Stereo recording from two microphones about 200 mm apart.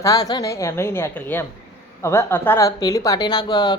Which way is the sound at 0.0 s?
20° left (ahead or behind).